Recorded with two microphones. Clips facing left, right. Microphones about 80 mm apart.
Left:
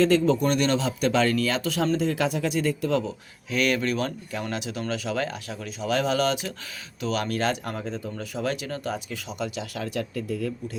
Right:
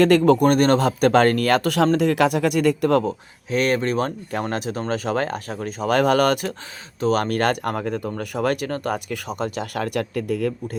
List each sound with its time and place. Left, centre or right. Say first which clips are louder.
0.0 s speech: right 6 dB; right
3.5 s speech: right 4 dB; right